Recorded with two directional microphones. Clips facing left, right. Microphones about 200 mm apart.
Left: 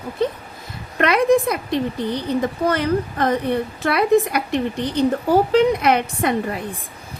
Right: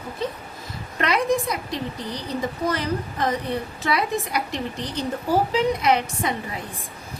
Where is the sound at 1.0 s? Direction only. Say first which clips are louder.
Left 6 dB; 60° left (ahead or behind).